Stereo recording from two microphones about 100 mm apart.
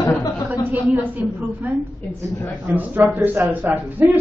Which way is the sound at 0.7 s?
15° right (ahead or behind).